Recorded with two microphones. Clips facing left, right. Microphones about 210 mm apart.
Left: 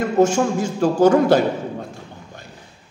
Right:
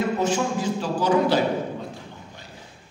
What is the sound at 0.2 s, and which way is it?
A man's voice, 50° left (ahead or behind).